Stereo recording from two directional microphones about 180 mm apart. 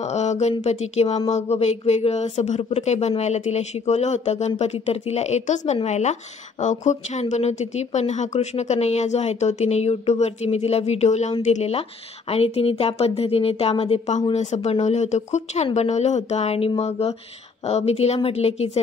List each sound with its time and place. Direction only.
0.0 s speech: 40° left (ahead or behind)